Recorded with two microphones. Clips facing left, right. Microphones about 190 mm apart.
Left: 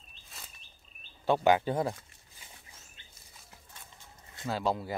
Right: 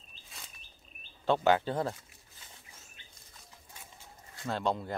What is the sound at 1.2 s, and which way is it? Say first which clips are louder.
Speech: left 1 dB; 10° left (ahead or behind).